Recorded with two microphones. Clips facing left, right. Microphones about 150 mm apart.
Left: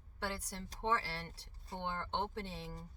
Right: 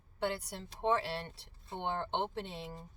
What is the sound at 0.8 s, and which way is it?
Speech, 20° right (ahead or behind).